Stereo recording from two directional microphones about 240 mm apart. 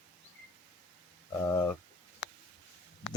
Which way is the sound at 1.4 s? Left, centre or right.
Centre.